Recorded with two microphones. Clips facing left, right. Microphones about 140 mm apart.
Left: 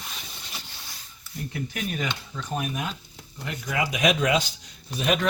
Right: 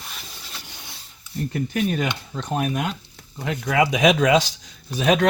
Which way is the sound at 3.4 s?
80° right.